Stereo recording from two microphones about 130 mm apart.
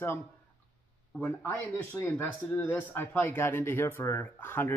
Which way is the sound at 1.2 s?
15° left (ahead or behind).